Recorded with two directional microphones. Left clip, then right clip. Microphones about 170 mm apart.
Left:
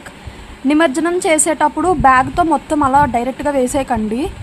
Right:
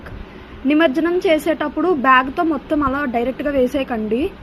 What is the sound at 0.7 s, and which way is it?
A woman's voice, 35° left (ahead or behind).